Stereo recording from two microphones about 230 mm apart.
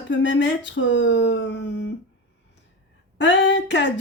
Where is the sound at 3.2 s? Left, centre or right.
Left.